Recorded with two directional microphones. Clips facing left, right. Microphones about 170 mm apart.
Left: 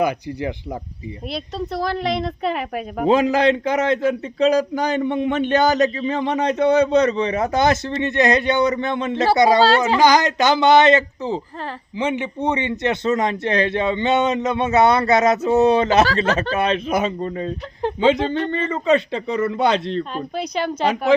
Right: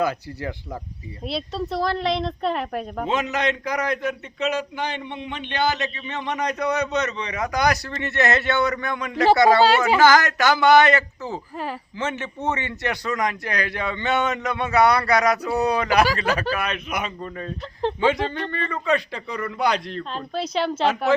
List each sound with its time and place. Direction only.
0.0 s speech: 15° left (ahead or behind)
1.3 s speech: centre (ahead or behind)
3.1 s a man's voice: 35° left (ahead or behind)
20.7 s speech: 15° left (ahead or behind)